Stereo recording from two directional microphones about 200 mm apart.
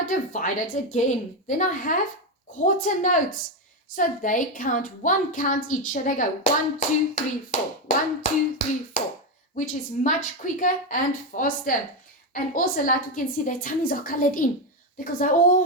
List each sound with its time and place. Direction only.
0.0 s a woman's voice: 40° left (ahead or behind)